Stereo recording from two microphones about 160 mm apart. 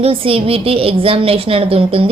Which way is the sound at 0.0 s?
35° right (ahead or behind).